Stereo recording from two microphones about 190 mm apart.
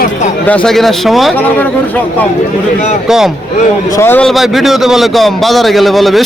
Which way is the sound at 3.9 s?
10° left (ahead or behind).